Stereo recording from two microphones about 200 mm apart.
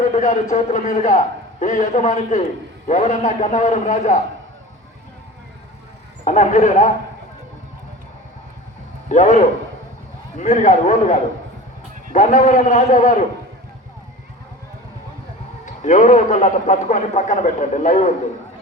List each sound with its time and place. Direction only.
0.0 s a man's voice: 40° left (ahead or behind)
6.2 s a man's voice: 35° left (ahead or behind)
9.0 s a man's voice: 35° left (ahead or behind)
12.1 s a man's voice: 35° left (ahead or behind)
15.6 s a man's voice: 35° left (ahead or behind)